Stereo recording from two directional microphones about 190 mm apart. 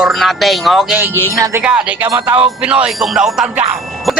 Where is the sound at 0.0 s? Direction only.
Centre (ahead or behind).